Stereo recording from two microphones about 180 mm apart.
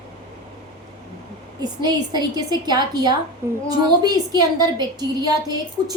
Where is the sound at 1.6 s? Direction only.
25° right (ahead or behind).